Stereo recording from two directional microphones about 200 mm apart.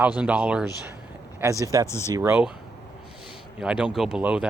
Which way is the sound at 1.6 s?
15° right (ahead or behind).